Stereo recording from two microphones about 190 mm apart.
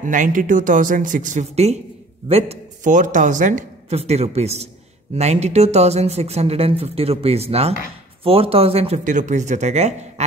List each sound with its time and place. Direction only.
0.0 s speech: 45° right (ahead or behind)